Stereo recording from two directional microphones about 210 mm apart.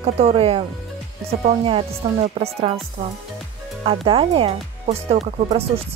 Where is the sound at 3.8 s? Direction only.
25° right (ahead or behind).